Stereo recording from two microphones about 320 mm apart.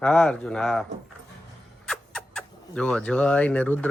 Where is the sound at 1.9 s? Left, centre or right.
Centre.